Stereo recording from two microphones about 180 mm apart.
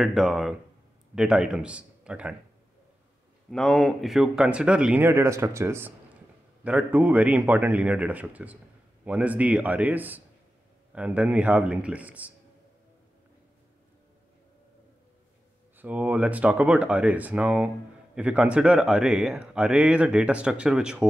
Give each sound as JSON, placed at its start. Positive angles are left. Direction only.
{"t": 0.0, "sound": "speech", "side_deg": 0}
{"t": 3.4, "sound": "speech", "side_deg": 0}
{"t": 15.8, "sound": "speech", "side_deg": -10}